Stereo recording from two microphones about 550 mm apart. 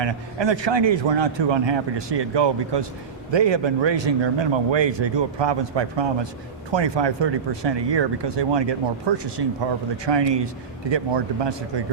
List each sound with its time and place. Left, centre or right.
0.0 s a man's voice: right